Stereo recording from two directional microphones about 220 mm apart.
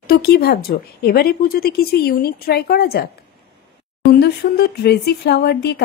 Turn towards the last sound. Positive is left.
turn(degrees=50)  # may be behind; listen again after turning